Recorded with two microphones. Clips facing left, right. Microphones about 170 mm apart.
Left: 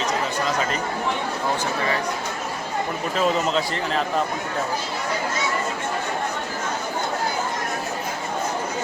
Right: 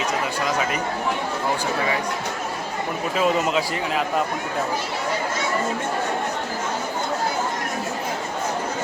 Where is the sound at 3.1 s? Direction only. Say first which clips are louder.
Right 1 dB; 5° right (ahead or behind).